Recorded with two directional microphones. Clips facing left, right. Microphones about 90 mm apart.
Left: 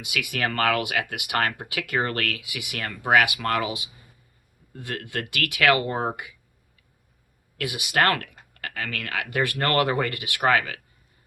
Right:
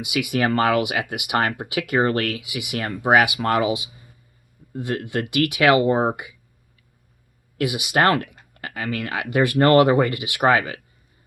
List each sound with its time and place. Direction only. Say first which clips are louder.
0.0 s speech: right 6 dB; 20° right (ahead or behind)
7.6 s speech: right 4 dB; 20° right (ahead or behind)